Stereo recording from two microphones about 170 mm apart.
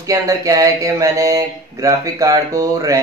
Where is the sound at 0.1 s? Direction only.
20° right (ahead or behind).